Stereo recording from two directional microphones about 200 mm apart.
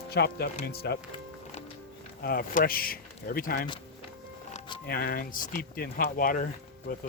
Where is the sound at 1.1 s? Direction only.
30° left (ahead or behind).